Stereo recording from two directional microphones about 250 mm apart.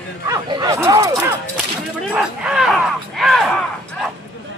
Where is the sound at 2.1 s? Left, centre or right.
Centre.